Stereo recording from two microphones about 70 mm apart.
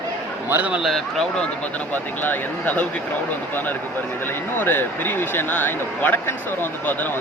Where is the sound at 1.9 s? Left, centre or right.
Left.